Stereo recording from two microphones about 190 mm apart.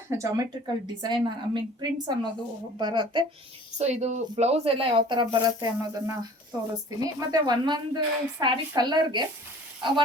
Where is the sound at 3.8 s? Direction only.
35° right (ahead or behind).